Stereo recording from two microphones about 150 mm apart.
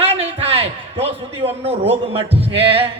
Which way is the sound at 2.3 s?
40° right (ahead or behind).